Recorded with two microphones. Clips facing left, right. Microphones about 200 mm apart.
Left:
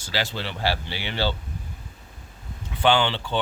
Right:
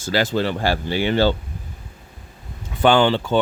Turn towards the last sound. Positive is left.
turn(degrees=-45)  # may be behind; listen again after turning